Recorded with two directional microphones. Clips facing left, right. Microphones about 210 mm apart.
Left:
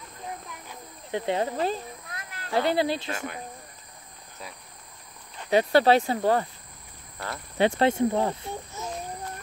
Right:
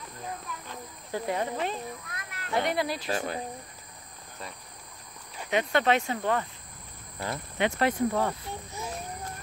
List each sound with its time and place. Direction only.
0.5 s a sound: 20° left (ahead or behind)
3.1 s cricket: 30° right (ahead or behind)
5.5 s speech: 35° left (ahead or behind)
7.5 s speech: 30° left (ahead or behind)